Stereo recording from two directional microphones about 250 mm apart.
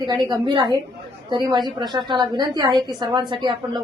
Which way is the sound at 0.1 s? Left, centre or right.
Centre.